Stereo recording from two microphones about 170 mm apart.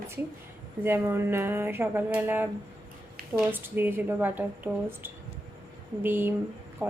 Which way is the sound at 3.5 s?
10° right (ahead or behind).